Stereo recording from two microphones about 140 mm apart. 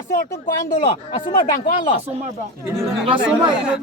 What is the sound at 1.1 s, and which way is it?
Speech, 65° left (ahead or behind).